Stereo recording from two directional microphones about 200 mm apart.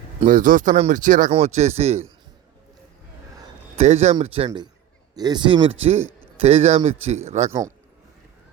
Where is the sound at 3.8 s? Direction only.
35° right (ahead or behind).